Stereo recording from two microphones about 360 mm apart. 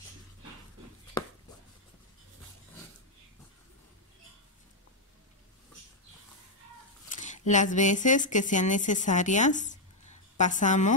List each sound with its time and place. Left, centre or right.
7.1 s speech: centre